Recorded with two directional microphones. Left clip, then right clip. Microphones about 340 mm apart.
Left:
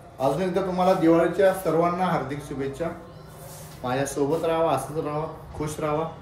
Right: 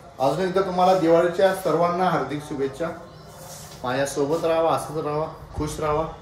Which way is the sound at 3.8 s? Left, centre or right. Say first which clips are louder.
Right 2 dB; centre.